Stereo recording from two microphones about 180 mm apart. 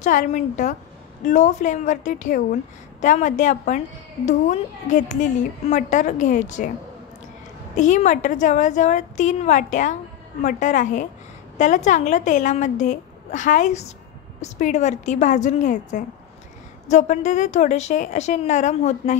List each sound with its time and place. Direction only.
0.0 s a woman's voice: 45° left (ahead or behind)
7.7 s a woman's voice: 40° left (ahead or behind)